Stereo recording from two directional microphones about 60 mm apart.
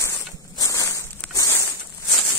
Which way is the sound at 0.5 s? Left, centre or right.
Left.